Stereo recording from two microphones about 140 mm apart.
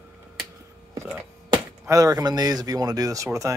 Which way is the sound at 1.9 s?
25° right (ahead or behind).